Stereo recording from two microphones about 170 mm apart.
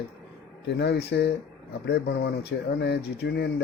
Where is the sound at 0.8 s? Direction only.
85° left.